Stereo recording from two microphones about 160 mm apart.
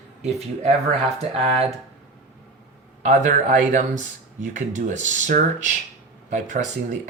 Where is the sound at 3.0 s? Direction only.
55° right (ahead or behind).